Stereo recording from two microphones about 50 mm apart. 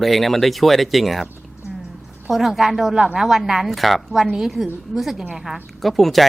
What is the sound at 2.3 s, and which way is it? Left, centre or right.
Speech, centre.